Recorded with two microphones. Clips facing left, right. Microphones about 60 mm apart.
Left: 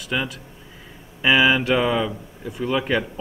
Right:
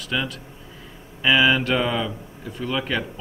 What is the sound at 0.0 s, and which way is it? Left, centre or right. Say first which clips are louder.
Speech: left 1 dB; centre.